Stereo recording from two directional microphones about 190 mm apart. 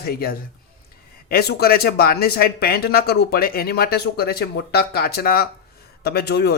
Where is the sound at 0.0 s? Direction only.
55° left (ahead or behind).